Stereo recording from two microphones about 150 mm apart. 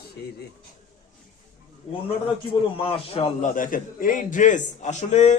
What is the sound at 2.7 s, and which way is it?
Speech, 35° left (ahead or behind).